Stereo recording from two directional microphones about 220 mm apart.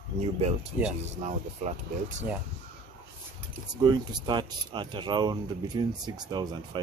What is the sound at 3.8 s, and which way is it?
Speech, 20° right (ahead or behind).